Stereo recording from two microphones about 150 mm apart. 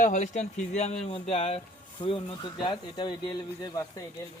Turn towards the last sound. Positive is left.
turn(degrees=30)  # may be behind; listen again after turning